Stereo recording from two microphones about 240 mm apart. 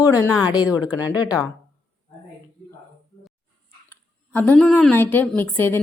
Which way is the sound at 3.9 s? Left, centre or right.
Centre.